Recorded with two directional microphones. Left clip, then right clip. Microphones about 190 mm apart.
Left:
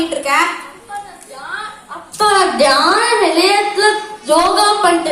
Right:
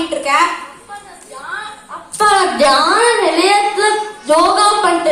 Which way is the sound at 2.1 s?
15° left (ahead or behind).